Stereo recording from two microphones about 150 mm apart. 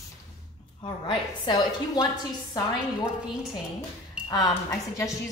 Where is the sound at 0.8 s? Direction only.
30° left (ahead or behind).